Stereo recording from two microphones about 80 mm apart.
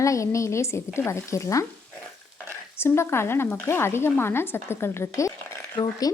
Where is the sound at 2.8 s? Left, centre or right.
Left.